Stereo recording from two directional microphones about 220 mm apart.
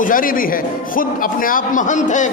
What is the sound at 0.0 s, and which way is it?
A man's voice, 40° left (ahead or behind).